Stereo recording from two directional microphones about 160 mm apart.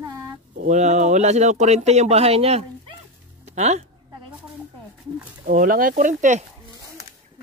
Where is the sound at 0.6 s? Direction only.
50° right (ahead or behind).